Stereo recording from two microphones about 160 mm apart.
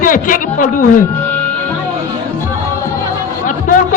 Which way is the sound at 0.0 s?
60° left (ahead or behind).